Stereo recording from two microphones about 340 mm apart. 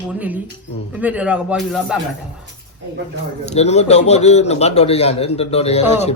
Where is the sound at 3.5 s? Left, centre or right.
Centre.